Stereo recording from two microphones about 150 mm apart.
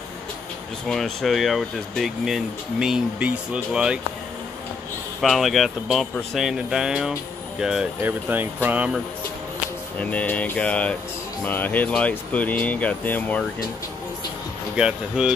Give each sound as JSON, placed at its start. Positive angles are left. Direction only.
{"t": 0.8, "sound": "speech", "side_deg": 0}
{"t": 5.2, "sound": "speech", "side_deg": 0}
{"t": 9.9, "sound": "speech", "side_deg": 10}
{"t": 14.8, "sound": "speech", "side_deg": -5}